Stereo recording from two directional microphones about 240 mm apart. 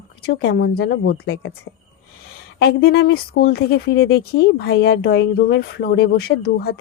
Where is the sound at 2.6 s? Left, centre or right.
Left.